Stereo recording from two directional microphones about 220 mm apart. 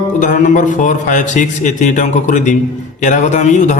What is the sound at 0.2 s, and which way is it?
A man's voice, 35° left (ahead or behind).